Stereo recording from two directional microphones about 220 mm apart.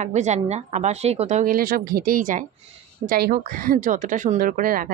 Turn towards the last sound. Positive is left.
turn(degrees=-40)  # may be behind; listen again after turning